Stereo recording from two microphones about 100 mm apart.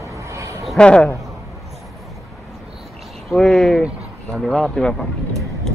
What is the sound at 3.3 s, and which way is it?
Speech, 5° left (ahead or behind).